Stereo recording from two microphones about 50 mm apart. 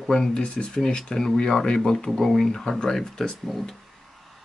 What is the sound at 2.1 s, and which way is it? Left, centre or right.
Speech, centre.